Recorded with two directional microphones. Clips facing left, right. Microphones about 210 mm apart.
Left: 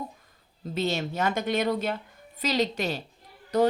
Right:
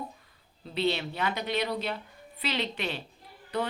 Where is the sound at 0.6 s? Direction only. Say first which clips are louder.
Left 1 dB; 45° left (ahead or behind).